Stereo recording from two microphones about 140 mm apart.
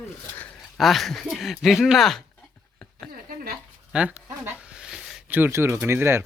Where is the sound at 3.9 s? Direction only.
10° right (ahead or behind).